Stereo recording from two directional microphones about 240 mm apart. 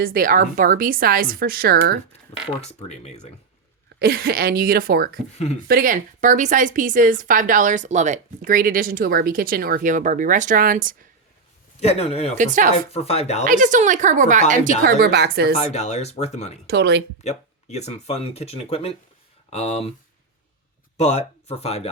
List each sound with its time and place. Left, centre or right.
0.0 s a woman's voice: right
2.6 s speech: left
4.0 s a woman's voice: right
11.8 s speech: left
12.4 s a woman's voice: right
12.7 s speech: left
13.4 s a woman's voice: right
15.5 s speech: left
16.6 s speech: right
17.2 s speech: left
21.0 s speech: left